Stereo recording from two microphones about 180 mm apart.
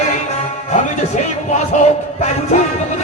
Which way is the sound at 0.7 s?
40° left (ahead or behind).